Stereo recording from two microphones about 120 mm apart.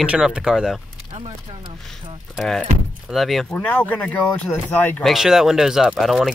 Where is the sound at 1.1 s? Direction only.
50° right (ahead or behind).